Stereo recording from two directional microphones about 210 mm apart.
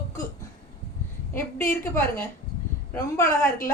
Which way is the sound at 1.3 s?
10° left (ahead or behind).